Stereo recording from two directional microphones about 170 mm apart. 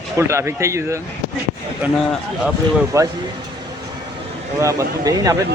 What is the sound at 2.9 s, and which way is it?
Speech, 20° right (ahead or behind).